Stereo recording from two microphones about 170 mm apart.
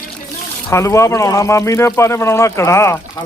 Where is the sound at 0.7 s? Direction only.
15° left (ahead or behind).